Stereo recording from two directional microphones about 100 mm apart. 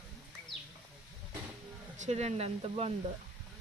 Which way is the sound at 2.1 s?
90° right.